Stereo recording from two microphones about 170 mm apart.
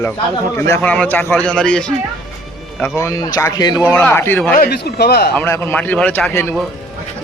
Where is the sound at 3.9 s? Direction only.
10° left (ahead or behind).